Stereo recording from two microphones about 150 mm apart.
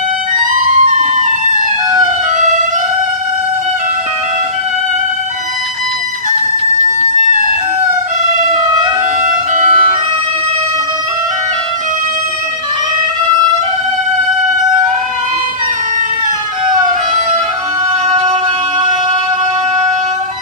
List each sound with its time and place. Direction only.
0.5 s music: 55° right (ahead or behind)
2.4 s music: 60° right (ahead or behind)
9.6 s music: 60° right (ahead or behind)